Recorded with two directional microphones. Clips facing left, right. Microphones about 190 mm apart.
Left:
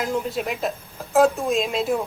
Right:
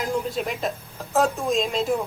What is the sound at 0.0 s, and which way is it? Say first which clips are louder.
Speech: left 1 dB; 5° left (ahead or behind).